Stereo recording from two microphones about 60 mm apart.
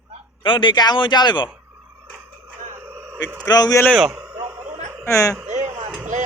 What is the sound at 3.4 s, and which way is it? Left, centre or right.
Speech, left.